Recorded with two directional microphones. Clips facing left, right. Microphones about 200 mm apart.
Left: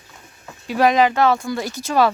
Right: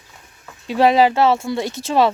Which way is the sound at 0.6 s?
25° right (ahead or behind).